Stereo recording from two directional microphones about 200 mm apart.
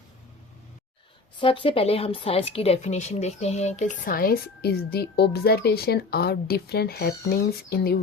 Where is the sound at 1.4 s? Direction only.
25° left (ahead or behind).